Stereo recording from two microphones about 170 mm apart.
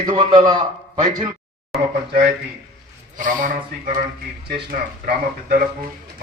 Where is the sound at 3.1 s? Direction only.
50° right (ahead or behind).